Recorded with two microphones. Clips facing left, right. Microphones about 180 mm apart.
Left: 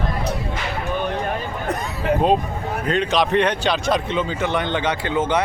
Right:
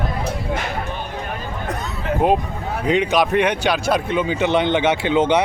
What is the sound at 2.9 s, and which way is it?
Speech, 10° right (ahead or behind).